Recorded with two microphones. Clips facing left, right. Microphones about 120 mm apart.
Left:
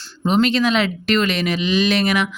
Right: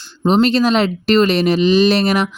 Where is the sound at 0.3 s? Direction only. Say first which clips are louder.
Right 4 dB; 35° right (ahead or behind).